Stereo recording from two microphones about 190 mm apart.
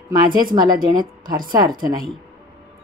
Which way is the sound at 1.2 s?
45° right (ahead or behind).